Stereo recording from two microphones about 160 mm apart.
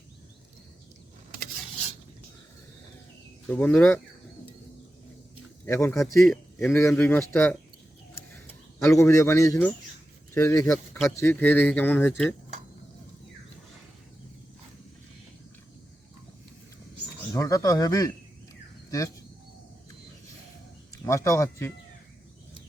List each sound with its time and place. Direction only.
3.5 s speech: 10° left (ahead or behind)
5.6 s speech: 15° left (ahead or behind)
8.8 s speech: 15° left (ahead or behind)
17.3 s speech: 20° left (ahead or behind)
21.0 s speech: 20° left (ahead or behind)